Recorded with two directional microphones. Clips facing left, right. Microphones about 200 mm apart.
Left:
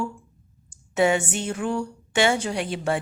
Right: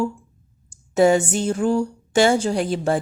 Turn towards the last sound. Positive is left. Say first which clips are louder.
# right 5 dB
turn(degrees=-35)  # may be behind; listen again after turning